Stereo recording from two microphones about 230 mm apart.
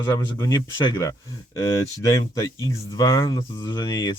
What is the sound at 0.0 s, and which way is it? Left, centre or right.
Speech, centre.